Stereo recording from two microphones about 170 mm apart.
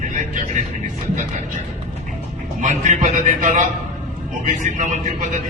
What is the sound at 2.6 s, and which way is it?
A man's voice, 45° right (ahead or behind).